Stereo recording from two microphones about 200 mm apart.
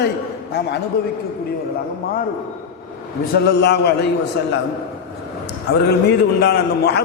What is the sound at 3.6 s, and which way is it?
Speech, 60° left (ahead or behind).